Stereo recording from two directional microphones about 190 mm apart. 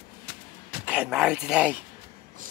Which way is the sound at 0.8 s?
5° right (ahead or behind).